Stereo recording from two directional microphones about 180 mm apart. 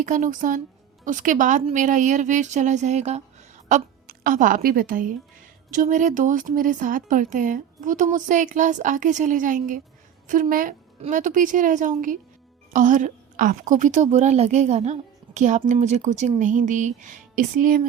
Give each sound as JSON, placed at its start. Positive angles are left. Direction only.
{"t": 0.0, "sound": "a woman's voice", "side_deg": -45}
{"t": 1.6, "sound": "a sound", "side_deg": -45}
{"t": 3.7, "sound": "a woman's voice", "side_deg": -45}